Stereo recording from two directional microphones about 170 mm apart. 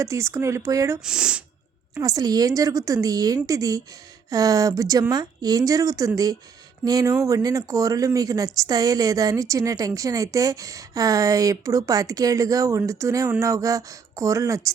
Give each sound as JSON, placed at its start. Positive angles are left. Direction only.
{"t": 0.0, "sound": "speech", "side_deg": -15}
{"t": 1.0, "sound": "speech", "side_deg": -5}
{"t": 2.0, "sound": "speech", "side_deg": -20}